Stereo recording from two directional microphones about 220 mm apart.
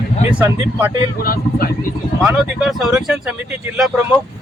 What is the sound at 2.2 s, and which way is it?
Speech, 5° right (ahead or behind).